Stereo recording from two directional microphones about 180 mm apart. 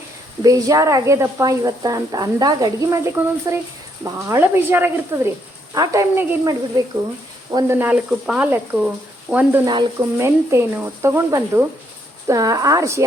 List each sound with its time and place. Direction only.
0.4 s speech: 20° right (ahead or behind)